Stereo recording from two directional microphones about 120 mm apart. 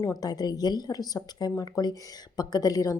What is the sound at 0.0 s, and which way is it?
A woman's voice, 30° left (ahead or behind).